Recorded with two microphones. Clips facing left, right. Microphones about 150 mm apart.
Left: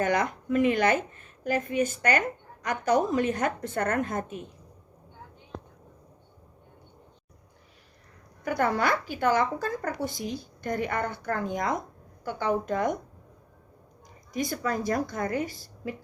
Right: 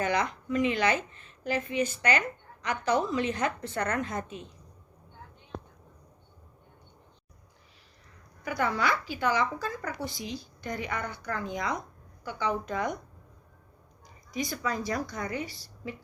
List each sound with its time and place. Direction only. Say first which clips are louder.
0.0 s a woman's voice: left 3 dB; 50° left (ahead or behind)
8.4 s a woman's voice: left 3 dB; 50° left (ahead or behind)
14.3 s a woman's voice: left 3 dB; 50° left (ahead or behind)